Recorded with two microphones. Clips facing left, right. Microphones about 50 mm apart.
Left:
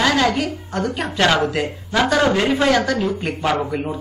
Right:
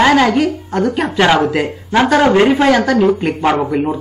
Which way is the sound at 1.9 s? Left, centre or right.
Right.